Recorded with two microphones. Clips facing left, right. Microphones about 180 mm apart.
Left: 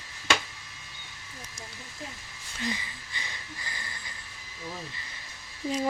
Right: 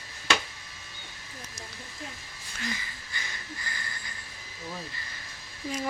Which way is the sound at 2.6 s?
25° left (ahead or behind).